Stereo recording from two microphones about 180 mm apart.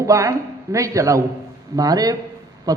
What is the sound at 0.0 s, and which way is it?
A man's voice, 20° right (ahead or behind).